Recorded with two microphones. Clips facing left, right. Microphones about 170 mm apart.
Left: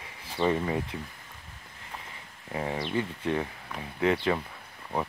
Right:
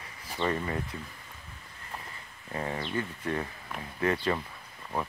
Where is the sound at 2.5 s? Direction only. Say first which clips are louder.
Left 3 dB; 10° left (ahead or behind).